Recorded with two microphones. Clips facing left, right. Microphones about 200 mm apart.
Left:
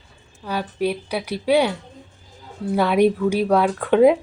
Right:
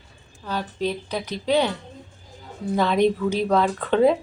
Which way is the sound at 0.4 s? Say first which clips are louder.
Left 3 dB; 10° left (ahead or behind).